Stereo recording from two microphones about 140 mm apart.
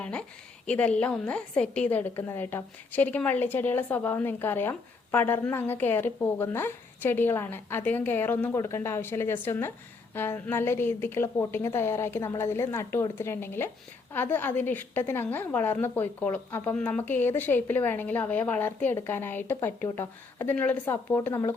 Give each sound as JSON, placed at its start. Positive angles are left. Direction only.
{"t": 0.0, "sound": "a woman's voice", "side_deg": 10}